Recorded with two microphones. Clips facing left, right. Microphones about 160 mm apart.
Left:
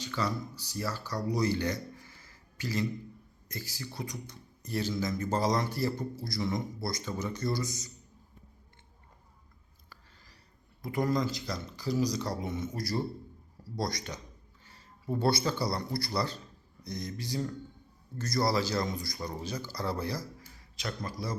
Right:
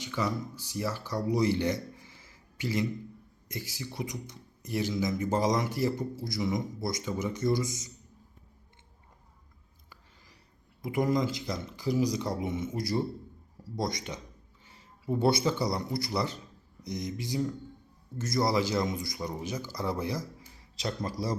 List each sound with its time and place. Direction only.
0.0 s speech: 20° right (ahead or behind)
10.8 s speech: 20° right (ahead or behind)
14.7 s a sound: 15° right (ahead or behind)
15.4 s speech: 20° right (ahead or behind)